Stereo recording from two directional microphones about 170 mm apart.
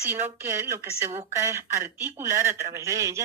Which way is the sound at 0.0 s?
10° right (ahead or behind).